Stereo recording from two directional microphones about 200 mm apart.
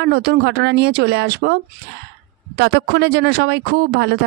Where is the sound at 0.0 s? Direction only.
55° right (ahead or behind).